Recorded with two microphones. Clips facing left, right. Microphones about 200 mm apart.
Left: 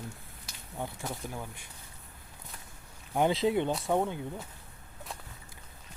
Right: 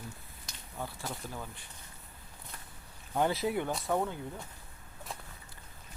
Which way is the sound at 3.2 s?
20° left (ahead or behind).